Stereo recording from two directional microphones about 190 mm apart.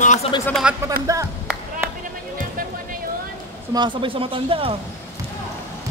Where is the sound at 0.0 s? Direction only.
40° left (ahead or behind).